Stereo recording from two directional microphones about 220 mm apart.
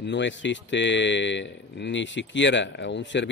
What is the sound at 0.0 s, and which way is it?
Speech, 55° left (ahead or behind).